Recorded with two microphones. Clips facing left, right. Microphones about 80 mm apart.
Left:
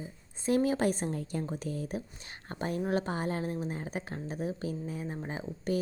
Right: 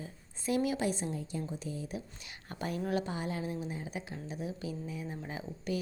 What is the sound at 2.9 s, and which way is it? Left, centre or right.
A woman's voice, left.